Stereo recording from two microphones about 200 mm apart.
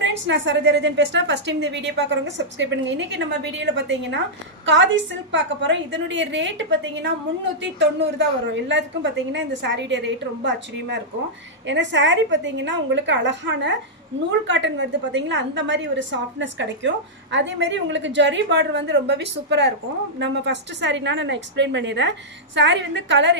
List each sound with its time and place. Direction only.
0.0 s a woman's voice: 65° right (ahead or behind)